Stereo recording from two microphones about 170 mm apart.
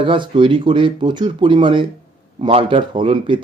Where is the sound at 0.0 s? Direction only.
30° right (ahead or behind).